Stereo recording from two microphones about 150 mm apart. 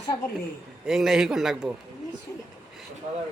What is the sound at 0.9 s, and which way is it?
Speech, centre (ahead or behind).